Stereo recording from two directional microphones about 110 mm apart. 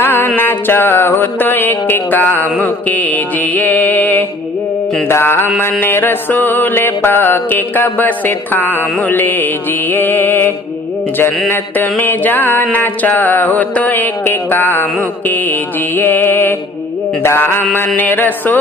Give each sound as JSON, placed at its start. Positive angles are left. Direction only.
{"t": 0.0, "sound": "mantra", "side_deg": 20}
{"t": 16.0, "sound": "mantra", "side_deg": 20}